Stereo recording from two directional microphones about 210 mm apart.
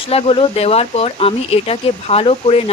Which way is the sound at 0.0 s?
25° left (ahead or behind).